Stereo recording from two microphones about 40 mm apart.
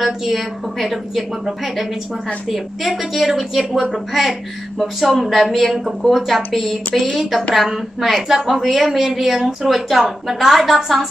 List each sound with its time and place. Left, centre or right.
0.0 s speech: centre
2.5 s speech: centre